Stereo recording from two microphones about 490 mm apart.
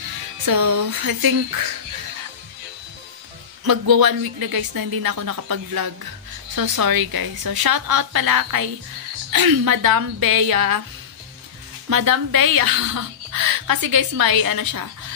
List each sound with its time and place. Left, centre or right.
0.5 s a woman's voice: right
3.6 s a woman's voice: right
11.9 s a woman's voice: right